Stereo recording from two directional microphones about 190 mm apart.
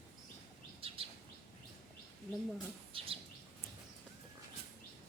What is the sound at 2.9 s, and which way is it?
Bird, 30° right (ahead or behind).